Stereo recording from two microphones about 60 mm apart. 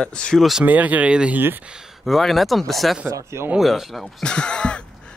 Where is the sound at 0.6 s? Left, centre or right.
Right.